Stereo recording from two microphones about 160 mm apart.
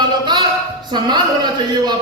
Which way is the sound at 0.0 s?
25° right (ahead or behind).